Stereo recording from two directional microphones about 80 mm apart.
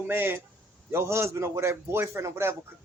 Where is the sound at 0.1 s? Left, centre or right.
Right.